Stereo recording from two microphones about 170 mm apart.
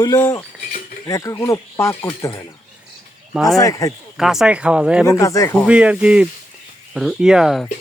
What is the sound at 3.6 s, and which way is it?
Speech, 20° left (ahead or behind).